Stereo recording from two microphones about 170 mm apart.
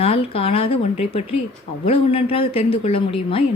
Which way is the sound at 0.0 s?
35° left (ahead or behind).